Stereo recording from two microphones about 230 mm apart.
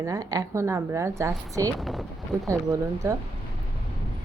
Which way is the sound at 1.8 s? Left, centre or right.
Centre.